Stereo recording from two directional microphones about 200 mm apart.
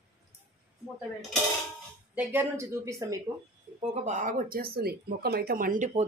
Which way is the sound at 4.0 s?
35° right (ahead or behind).